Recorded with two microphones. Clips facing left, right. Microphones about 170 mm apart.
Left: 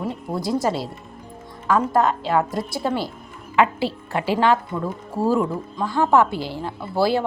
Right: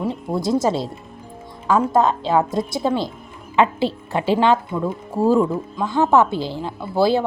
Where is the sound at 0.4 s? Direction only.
25° right (ahead or behind).